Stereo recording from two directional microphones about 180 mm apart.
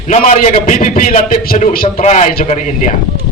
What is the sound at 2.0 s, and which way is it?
Speech, 40° left (ahead or behind).